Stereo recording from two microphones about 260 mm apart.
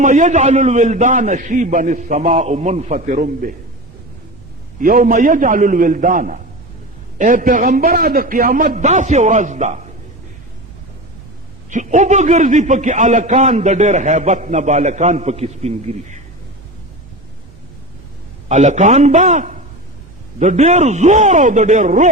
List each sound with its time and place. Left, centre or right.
0.0 s a man's voice: right
4.8 s a man's voice: right
11.7 s a man's voice: right
18.4 s a man's voice: right